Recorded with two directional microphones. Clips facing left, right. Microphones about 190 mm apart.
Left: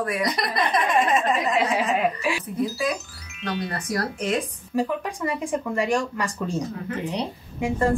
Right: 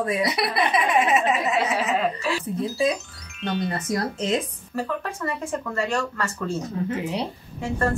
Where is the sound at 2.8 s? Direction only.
25° right (ahead or behind).